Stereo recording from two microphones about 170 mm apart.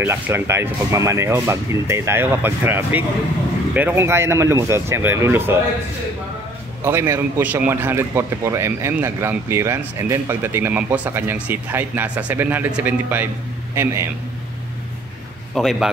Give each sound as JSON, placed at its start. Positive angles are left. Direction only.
{"t": 0.0, "sound": "a man's voice", "side_deg": -15}
{"t": 6.8, "sound": "a man's voice", "side_deg": -15}
{"t": 15.5, "sound": "a man's voice", "side_deg": 0}